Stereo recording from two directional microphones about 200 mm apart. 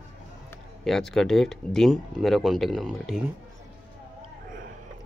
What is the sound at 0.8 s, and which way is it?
Speech, centre (ahead or behind).